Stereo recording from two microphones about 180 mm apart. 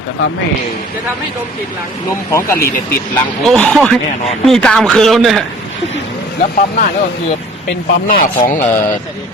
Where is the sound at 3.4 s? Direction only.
5° left (ahead or behind).